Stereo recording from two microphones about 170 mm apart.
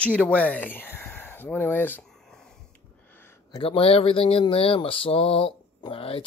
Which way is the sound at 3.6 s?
35° left (ahead or behind).